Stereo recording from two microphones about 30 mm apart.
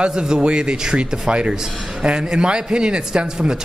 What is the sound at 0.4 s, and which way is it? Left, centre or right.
A man's voice, right.